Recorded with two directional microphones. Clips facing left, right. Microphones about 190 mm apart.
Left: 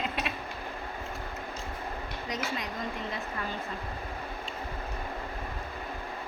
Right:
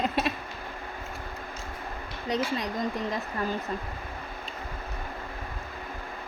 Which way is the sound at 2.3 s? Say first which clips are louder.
Right 7 dB; 35° right (ahead or behind).